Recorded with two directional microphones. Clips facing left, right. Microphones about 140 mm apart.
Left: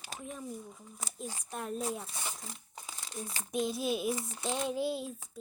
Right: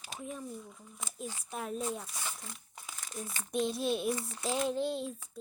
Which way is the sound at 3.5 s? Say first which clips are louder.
Right 1 dB; centre (ahead or behind).